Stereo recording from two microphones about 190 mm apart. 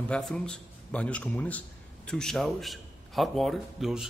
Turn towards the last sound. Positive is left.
turn(degrees=0)  # may be behind; listen again after turning